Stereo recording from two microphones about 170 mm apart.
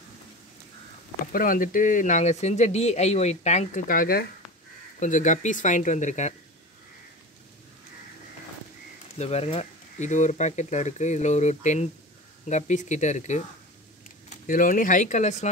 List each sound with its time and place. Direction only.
1.2 s speech: 55° left (ahead or behind)
5.0 s speech: 45° left (ahead or behind)
9.2 s speech: 35° left (ahead or behind)
14.4 s speech: 50° left (ahead or behind)